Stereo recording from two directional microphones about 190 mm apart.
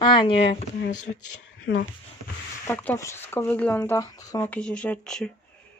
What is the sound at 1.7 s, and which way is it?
Speech, 90° left.